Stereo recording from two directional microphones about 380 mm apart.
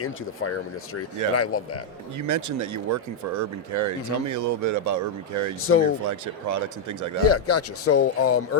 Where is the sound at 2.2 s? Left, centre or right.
Right.